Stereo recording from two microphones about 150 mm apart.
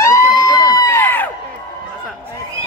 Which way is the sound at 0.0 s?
20° left (ahead or behind).